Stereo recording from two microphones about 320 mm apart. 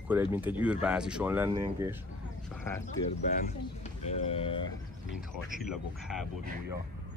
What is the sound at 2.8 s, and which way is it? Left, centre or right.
Speech, left.